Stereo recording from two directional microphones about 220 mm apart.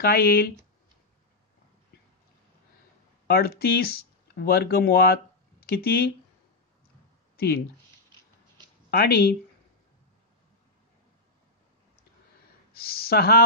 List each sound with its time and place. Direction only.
0.0 s speech: 45° left (ahead or behind)
3.3 s speech: 45° left (ahead or behind)
7.3 s speech: 45° left (ahead or behind)
8.9 s speech: 45° left (ahead or behind)
12.7 s speech: 45° left (ahead or behind)